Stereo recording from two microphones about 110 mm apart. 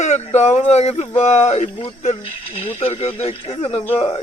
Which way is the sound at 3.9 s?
25° left (ahead or behind).